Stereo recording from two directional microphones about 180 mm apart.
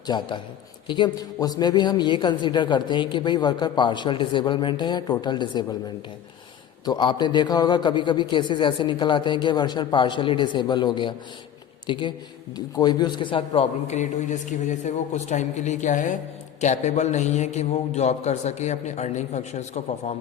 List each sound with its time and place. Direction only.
0.1 s a man's voice: 25° left (ahead or behind)
6.8 s a man's voice: 25° left (ahead or behind)